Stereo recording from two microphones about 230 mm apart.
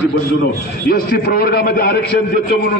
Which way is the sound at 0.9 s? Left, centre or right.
Left.